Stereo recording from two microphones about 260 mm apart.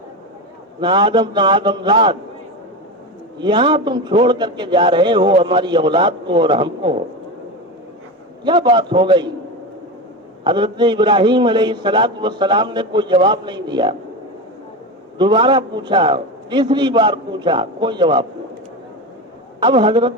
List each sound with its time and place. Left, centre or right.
0.8 s a man's voice: centre
3.3 s a man's voice: centre
8.4 s a man's voice: centre
10.4 s a man's voice: centre
15.2 s a man's voice: centre
19.5 s a man's voice: centre